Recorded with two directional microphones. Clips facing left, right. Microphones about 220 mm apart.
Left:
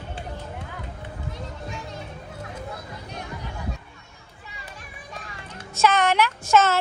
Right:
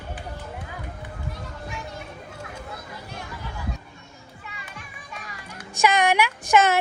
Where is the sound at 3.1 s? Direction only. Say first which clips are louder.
Left 2 dB; 20° left (ahead or behind).